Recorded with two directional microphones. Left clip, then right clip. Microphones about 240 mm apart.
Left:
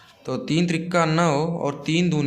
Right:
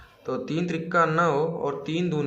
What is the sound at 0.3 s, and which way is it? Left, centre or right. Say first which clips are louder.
A man's voice: left 4 dB; left.